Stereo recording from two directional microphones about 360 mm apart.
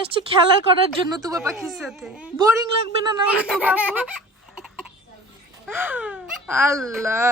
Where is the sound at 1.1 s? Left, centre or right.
Centre.